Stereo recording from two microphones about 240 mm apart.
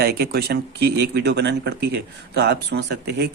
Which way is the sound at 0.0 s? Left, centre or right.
Right.